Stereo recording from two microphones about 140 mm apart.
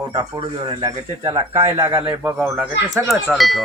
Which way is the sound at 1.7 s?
20° right (ahead or behind).